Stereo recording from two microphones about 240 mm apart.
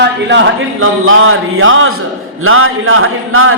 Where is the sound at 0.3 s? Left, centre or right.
Right.